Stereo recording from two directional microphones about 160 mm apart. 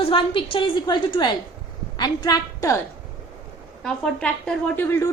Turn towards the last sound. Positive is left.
turn(degrees=15)  # may be behind; listen again after turning